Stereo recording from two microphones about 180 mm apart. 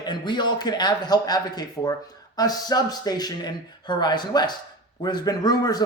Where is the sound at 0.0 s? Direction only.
25° left (ahead or behind).